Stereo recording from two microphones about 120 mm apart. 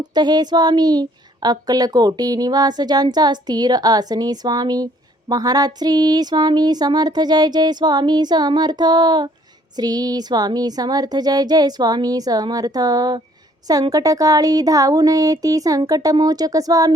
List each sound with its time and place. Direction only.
0.0 s speech: 35° right (ahead or behind)